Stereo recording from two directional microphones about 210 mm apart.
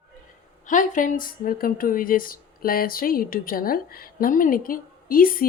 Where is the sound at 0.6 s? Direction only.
40° left (ahead or behind).